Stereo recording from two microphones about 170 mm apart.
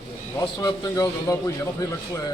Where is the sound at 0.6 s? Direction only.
20° left (ahead or behind).